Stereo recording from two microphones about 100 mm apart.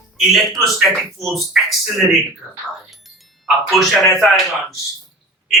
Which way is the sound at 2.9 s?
Centre (ahead or behind).